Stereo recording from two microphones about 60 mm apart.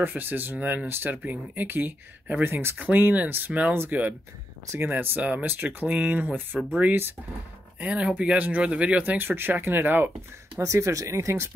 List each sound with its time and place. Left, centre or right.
0.0 s speech: right
10.6 s speech: right